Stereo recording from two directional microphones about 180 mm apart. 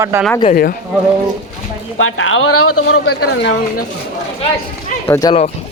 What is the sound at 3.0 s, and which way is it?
Speech, 70° left (ahead or behind).